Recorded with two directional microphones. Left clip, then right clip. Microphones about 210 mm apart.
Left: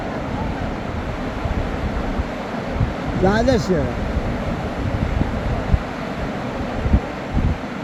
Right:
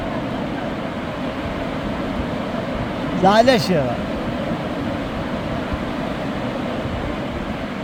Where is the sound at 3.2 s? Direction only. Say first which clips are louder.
Right 4 dB; 50° right (ahead or behind).